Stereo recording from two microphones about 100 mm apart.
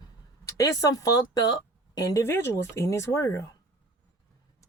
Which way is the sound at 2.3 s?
25° left (ahead or behind).